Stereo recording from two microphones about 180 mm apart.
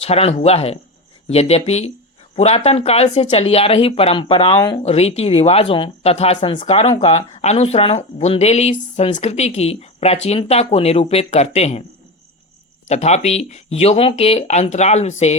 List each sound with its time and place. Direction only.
0.0 s speech: 35° left (ahead or behind)
12.9 s speech: 40° left (ahead or behind)